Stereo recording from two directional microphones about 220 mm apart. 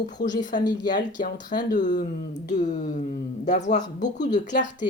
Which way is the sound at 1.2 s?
35° left (ahead or behind).